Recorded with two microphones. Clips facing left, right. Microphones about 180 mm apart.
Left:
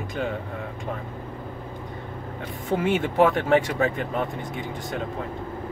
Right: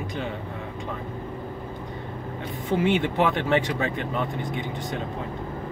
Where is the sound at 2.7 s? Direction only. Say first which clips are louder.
Right 1 dB; 45° left (ahead or behind).